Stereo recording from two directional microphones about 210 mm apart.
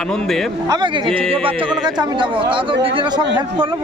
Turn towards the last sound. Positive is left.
turn(degrees=-25)  # may be behind; listen again after turning